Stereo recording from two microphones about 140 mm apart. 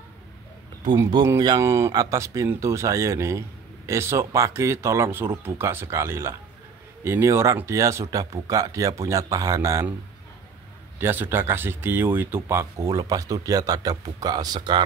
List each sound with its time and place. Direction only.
0.8 s speech: 25° right (ahead or behind)
11.0 s speech: 15° right (ahead or behind); by 14.8 s 30° right (ahead or behind)